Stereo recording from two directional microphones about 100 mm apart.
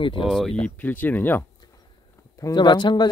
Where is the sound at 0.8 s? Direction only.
20° left (ahead or behind).